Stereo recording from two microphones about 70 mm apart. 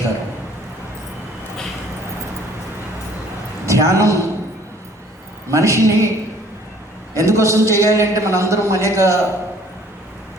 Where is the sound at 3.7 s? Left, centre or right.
Right.